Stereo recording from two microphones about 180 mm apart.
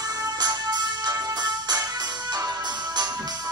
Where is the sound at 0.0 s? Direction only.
20° right (ahead or behind).